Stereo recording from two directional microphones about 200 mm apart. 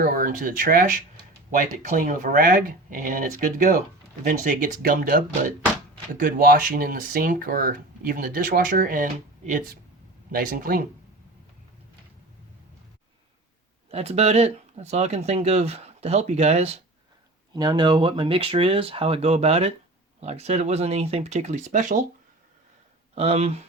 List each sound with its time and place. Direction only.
0.0 s speech: 40° right (ahead or behind)
10.3 s speech: 45° right (ahead or behind)
13.9 s speech: 30° right (ahead or behind)
17.5 s speech: 20° right (ahead or behind); by 22.0 s 40° right (ahead or behind)
23.1 s speech: 30° right (ahead or behind)